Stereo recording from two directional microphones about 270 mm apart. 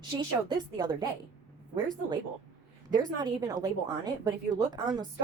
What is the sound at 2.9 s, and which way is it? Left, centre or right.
A woman's voice, centre.